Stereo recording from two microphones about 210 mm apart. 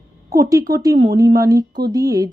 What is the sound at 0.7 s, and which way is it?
Speech, 15° right (ahead or behind).